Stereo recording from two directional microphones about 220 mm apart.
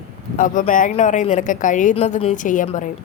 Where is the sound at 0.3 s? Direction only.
35° left (ahead or behind).